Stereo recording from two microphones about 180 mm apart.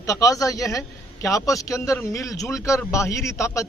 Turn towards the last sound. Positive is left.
turn(degrees=15)  # may be behind; listen again after turning